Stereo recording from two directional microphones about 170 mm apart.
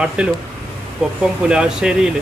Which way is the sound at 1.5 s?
5° right (ahead or behind).